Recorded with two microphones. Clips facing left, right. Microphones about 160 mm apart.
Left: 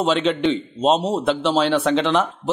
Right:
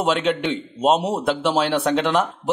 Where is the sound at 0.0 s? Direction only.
5° right (ahead or behind).